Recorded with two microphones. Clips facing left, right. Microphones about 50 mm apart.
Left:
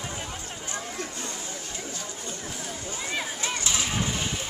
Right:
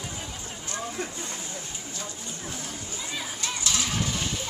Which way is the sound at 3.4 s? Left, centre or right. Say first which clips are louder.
Right 2 dB; left.